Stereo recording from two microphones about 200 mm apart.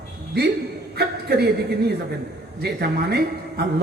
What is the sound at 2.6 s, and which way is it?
A man's voice, 55° right (ahead or behind).